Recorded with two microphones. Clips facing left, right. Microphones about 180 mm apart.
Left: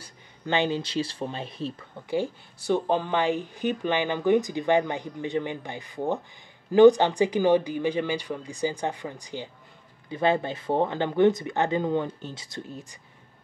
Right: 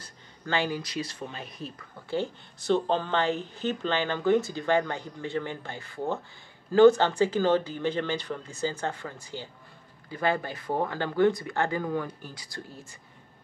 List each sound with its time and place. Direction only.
0.0 s speech: 20° left (ahead or behind)
2.0 s speech: 10° left (ahead or behind)